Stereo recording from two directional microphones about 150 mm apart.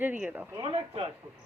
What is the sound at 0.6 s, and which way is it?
Speech, 40° right (ahead or behind).